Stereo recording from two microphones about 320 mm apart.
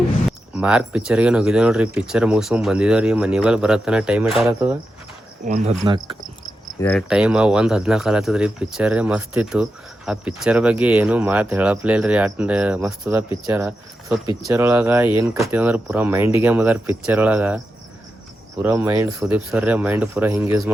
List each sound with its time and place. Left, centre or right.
0.3 s speech: centre
5.5 s speech: centre
6.7 s speech: centre
18.6 s speech: centre